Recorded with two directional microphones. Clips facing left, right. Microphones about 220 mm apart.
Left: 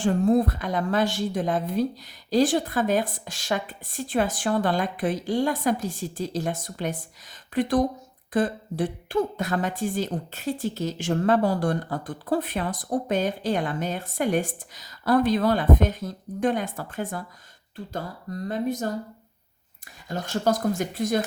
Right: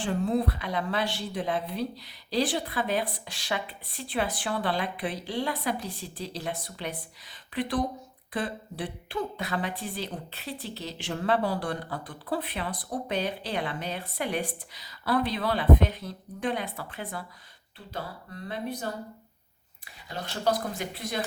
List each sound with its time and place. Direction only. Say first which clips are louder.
0.0 s speech: left 6 dB; 45° left (ahead or behind)
20.1 s speech: left 4 dB; 45° left (ahead or behind)